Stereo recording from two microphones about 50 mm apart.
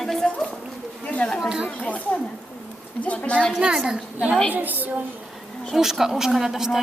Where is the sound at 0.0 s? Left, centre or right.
Centre.